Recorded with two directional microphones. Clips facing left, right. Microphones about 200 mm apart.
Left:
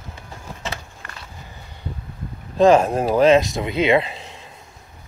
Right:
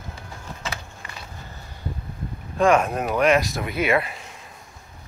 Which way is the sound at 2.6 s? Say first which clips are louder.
Left 5 dB; 25° left (ahead or behind).